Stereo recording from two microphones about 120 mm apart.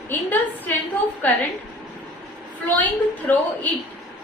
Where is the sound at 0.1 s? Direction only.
15° left (ahead or behind).